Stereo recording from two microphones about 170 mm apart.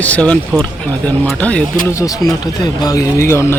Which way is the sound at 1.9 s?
20° left (ahead or behind).